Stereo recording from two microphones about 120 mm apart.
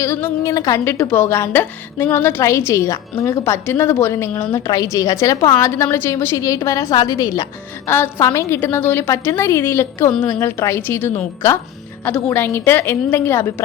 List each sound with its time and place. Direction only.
0.0 s a woman's voice: 20° left (ahead or behind)
7.9 s a woman's voice: 20° left (ahead or behind)